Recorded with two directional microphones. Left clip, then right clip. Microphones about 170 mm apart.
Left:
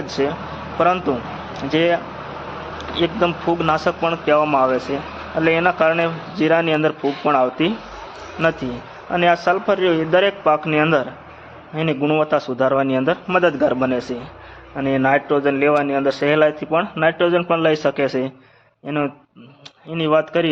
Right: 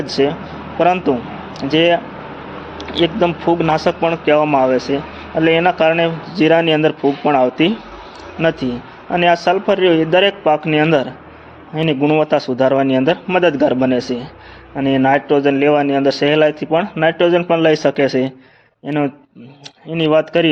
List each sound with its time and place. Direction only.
0.0 s a man's voice: 25° right (ahead or behind)
3.0 s a man's voice: 25° right (ahead or behind)